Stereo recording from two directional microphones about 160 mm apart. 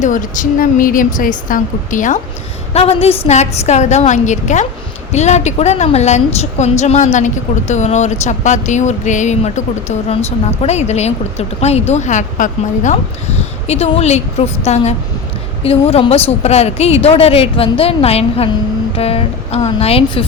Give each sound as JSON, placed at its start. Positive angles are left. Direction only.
{"t": 0.0, "sound": "a woman's voice", "side_deg": 55}
{"t": 2.7, "sound": "a woman's voice", "side_deg": 40}